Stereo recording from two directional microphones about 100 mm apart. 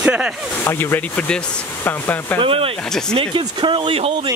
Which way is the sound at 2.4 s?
70° right (ahead or behind).